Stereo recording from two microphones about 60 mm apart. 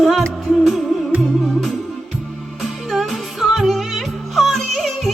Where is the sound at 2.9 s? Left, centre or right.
Centre.